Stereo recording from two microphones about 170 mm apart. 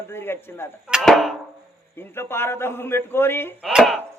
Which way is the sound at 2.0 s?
15° left (ahead or behind).